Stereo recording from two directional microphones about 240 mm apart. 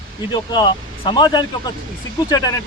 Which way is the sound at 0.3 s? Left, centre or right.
Centre.